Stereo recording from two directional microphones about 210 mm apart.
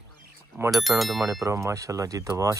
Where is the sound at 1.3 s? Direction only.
15° right (ahead or behind).